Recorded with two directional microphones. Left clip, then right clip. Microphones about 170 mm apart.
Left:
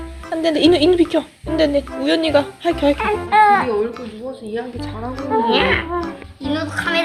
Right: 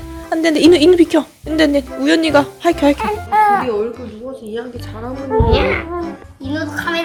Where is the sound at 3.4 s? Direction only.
20° right (ahead or behind).